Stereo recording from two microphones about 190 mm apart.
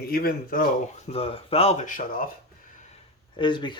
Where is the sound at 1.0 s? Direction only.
30° left (ahead or behind); by 2.3 s 50° left (ahead or behind).